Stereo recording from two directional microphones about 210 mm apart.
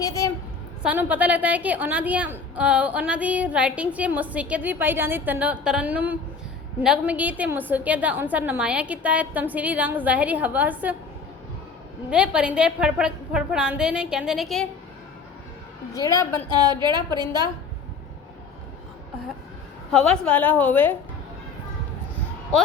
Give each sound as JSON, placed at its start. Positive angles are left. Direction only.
{"t": 0.0, "sound": "a woman's voice", "side_deg": 15}
{"t": 0.8, "sound": "a woman's voice", "side_deg": -5}
{"t": 12.1, "sound": "a woman's voice", "side_deg": -5}
{"t": 15.9, "sound": "a woman's voice", "side_deg": 15}
{"t": 16.6, "sound": "a woman's voice", "side_deg": -20}
{"t": 19.9, "sound": "a woman's voice", "side_deg": 5}